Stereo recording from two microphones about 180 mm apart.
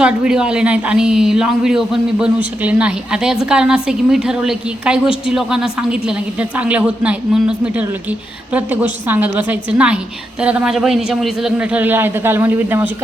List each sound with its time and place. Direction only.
0.0 s a man's voice: 5° right (ahead or behind)